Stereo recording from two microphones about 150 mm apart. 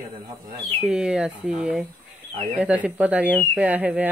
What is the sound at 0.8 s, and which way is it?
Speech, 5° right (ahead or behind).